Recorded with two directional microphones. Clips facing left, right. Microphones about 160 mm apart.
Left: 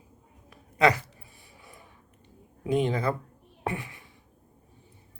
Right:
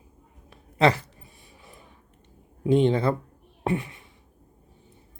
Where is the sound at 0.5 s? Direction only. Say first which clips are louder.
Right 2 dB; 30° right (ahead or behind).